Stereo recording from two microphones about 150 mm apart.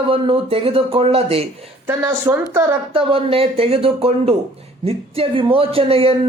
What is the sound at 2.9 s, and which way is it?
Speech, 35° right (ahead or behind).